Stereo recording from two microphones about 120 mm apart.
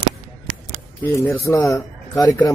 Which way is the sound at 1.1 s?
25° left (ahead or behind).